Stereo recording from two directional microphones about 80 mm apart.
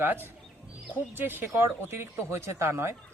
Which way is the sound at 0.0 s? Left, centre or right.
Right.